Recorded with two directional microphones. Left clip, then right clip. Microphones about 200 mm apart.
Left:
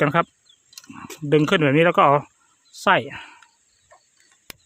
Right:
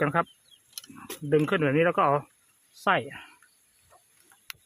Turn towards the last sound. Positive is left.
turn(degrees=55)  # may be behind; listen again after turning